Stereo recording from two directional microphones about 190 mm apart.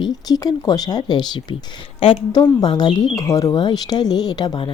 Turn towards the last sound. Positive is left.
turn(degrees=25)  # may be behind; listen again after turning